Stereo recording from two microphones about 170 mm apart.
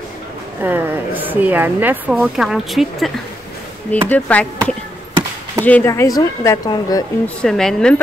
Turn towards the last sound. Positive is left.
turn(degrees=5)  # may be behind; listen again after turning